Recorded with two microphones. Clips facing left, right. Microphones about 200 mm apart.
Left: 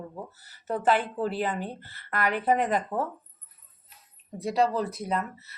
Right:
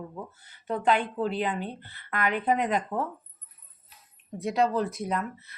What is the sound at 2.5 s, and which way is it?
Speech, 40° left (ahead or behind).